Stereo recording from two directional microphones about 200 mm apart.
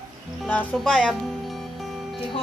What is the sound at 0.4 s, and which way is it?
Speech, 5° left (ahead or behind).